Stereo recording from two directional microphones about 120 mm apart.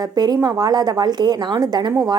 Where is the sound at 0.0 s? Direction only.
35° right (ahead or behind).